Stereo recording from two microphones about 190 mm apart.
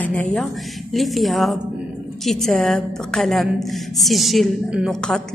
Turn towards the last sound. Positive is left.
turn(degrees=5)  # may be behind; listen again after turning